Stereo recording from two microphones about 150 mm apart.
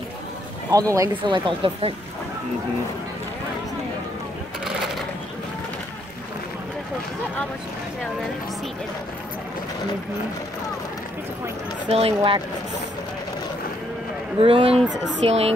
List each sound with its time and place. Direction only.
0.7 s speech: 20° right (ahead or behind)
1.2 s speech: 30° right (ahead or behind)
11.9 s speech: 40° right (ahead or behind)
14.4 s speech: 40° right (ahead or behind)